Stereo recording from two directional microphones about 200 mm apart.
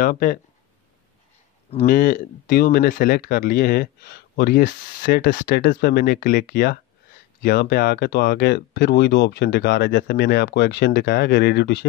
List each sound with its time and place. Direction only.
0.0 s speech: 45° left (ahead or behind)
1.9 s speech: 40° left (ahead or behind)